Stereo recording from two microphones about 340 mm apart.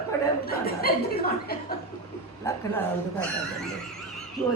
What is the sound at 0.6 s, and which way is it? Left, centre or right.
Speech, left.